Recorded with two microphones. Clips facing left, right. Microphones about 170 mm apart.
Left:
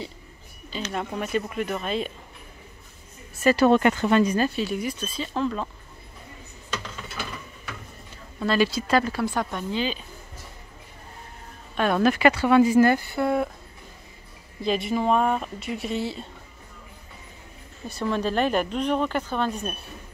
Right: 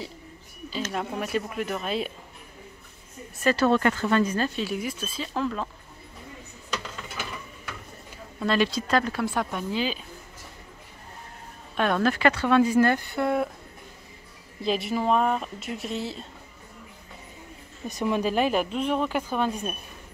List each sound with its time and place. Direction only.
0.9 s speech: centre (ahead or behind)
3.4 s speech: 15° left (ahead or behind)
4.6 s speech: centre (ahead or behind)
8.4 s speech: centre (ahead or behind)
11.7 s speech: centre (ahead or behind)
12.0 s speech: 10° left (ahead or behind)
14.6 s speech: centre (ahead or behind)
17.8 s speech: 15° right (ahead or behind)